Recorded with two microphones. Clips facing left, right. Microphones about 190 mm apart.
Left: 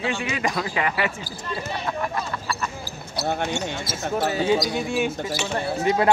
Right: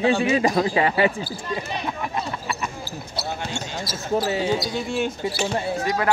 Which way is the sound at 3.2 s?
55° left (ahead or behind).